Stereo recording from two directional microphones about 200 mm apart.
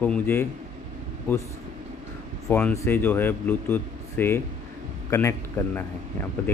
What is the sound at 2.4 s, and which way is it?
Speech, 5° left (ahead or behind).